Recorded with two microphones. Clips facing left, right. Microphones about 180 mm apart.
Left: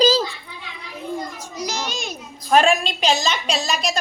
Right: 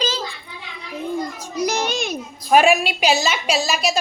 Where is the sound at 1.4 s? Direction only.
55° right (ahead or behind).